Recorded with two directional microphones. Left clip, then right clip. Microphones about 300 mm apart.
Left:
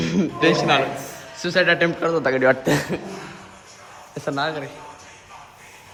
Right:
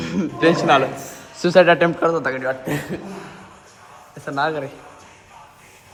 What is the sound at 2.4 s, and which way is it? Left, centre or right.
Speech, left.